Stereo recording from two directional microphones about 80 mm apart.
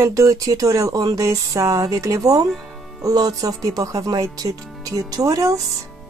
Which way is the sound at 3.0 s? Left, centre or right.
Right.